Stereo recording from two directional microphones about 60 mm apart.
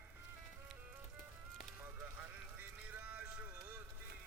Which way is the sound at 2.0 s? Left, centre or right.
Right.